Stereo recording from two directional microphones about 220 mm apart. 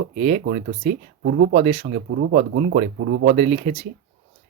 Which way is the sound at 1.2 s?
50° right (ahead or behind).